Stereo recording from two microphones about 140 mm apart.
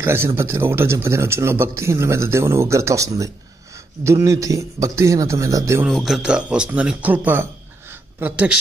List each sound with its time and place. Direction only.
0.0 s speech: 20° right (ahead or behind)
5.9 s speech: centre (ahead or behind)
7.9 s a sound: 10° right (ahead or behind)